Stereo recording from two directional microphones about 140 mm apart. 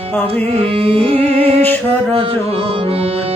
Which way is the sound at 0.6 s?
40° right (ahead or behind).